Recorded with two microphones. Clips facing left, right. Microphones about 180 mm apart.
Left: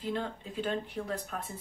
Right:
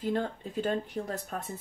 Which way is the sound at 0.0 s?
45° right (ahead or behind).